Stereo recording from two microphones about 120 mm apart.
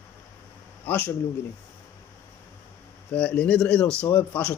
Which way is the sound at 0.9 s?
15° left (ahead or behind).